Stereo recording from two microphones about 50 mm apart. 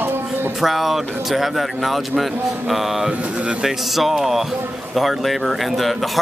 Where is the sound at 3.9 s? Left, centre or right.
Centre.